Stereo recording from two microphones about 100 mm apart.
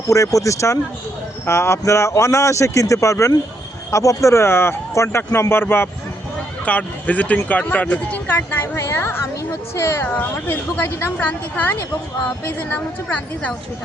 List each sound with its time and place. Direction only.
0.1 s a woman's voice: 30° left (ahead or behind); by 13.5 s 15° left (ahead or behind)